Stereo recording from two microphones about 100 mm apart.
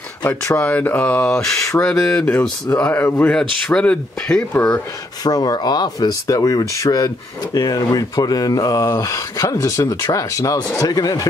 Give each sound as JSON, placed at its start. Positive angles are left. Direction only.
{"t": 0.6, "sound": "speech", "side_deg": 15}
{"t": 2.8, "sound": "speech", "side_deg": 25}
{"t": 3.6, "sound": "speech", "side_deg": 10}
{"t": 5.2, "sound": "speech", "side_deg": 40}